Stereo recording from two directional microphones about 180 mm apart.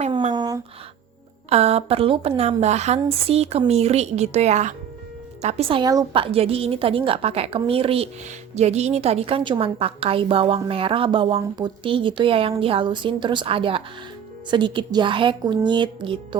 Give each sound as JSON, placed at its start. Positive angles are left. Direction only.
{"t": 0.0, "sound": "speech", "side_deg": -40}
{"t": 0.3, "sound": "a sound", "side_deg": -20}
{"t": 1.5, "sound": "a woman's voice", "side_deg": -35}